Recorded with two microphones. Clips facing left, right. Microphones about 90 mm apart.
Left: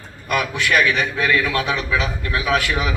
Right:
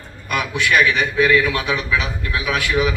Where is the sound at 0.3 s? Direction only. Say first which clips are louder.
Even; 35° left (ahead or behind).